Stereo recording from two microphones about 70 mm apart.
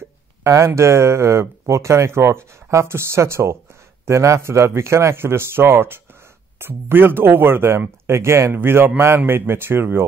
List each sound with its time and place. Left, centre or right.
0.4 s speech: right